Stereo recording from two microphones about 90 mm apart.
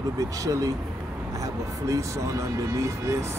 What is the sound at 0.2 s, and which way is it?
Speech, 40° right (ahead or behind).